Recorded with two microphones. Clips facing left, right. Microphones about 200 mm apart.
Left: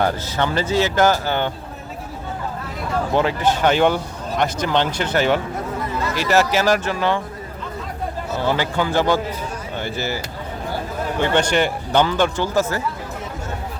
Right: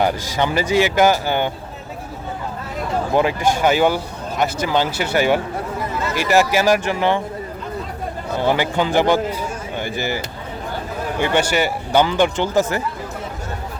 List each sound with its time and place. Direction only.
0.0 s speech: 15° right (ahead or behind)
3.2 s speech: 10° right (ahead or behind)
8.4 s speech: 15° right (ahead or behind)
11.2 s speech: 10° right (ahead or behind)